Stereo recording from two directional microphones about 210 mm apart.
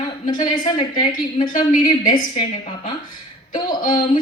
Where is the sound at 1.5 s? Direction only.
40° left (ahead or behind).